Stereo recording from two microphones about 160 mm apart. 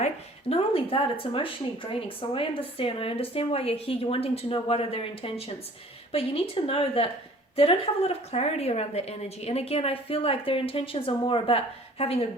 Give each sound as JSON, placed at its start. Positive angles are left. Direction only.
{"t": 0.0, "sound": "speech", "side_deg": 40}